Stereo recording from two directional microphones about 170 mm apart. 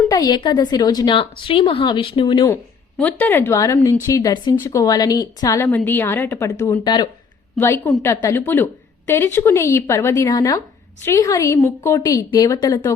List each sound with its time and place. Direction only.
0.1 s a woman's voice: 25° left (ahead or behind)
3.0 s a woman's voice: 10° left (ahead or behind); by 7.1 s 25° left (ahead or behind)
7.6 s a woman's voice: 10° left (ahead or behind)